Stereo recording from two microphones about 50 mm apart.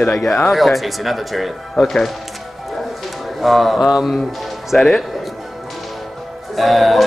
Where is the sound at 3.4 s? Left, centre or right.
Centre.